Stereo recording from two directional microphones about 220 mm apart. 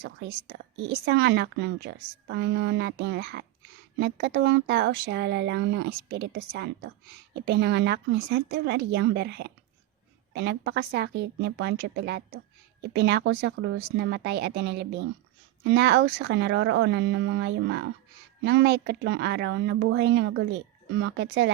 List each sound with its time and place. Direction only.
0.0 s speech: 50° right (ahead or behind)